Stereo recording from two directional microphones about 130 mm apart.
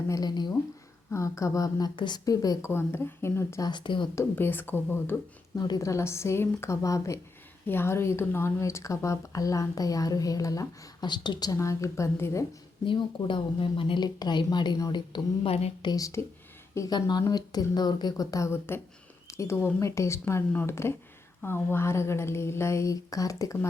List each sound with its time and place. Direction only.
0.1 s speech: 30° left (ahead or behind)
1.1 s speech: 25° left (ahead or behind)
3.7 s speech: 40° left (ahead or behind)
4.1 s speech: 15° left (ahead or behind)
5.5 s speech: 30° left (ahead or behind)
12.8 s speech: 40° left (ahead or behind)
15.4 s a woman's voice: 50° left (ahead or behind)
15.8 s speech: 30° left (ahead or behind)